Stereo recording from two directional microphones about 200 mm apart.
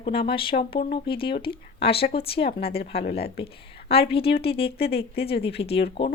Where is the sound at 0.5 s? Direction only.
40° left (ahead or behind).